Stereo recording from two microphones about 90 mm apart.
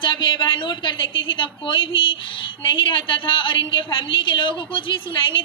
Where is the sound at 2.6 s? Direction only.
65° left (ahead or behind).